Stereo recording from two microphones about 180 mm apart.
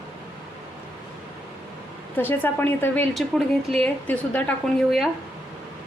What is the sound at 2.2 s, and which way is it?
A woman's voice, 10° left (ahead or behind).